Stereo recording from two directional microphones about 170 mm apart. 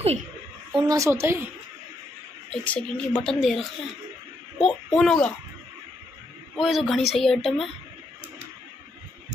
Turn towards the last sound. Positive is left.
turn(degrees=0)  # may be behind; listen again after turning